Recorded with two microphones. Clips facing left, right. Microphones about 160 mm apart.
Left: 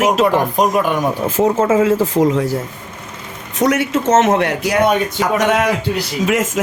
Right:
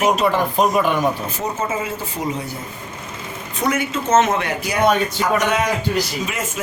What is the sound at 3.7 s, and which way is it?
A man's voice, 85° left.